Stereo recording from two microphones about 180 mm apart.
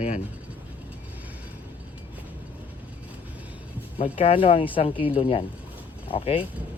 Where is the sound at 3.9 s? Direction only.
30° left (ahead or behind).